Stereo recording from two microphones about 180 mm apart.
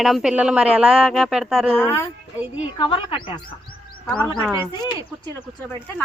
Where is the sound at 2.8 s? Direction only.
25° left (ahead or behind).